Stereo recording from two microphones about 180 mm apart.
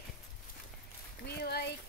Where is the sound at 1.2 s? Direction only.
65° left (ahead or behind).